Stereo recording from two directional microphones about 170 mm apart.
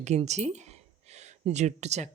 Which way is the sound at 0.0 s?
40° right (ahead or behind).